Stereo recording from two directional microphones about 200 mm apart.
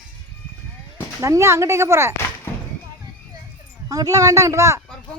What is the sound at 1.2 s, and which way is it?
Speech, 15° right (ahead or behind).